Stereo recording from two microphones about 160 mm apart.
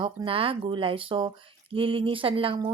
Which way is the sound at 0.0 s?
35° right (ahead or behind).